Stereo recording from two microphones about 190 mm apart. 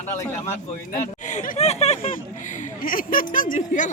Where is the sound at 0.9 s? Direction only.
40° left (ahead or behind).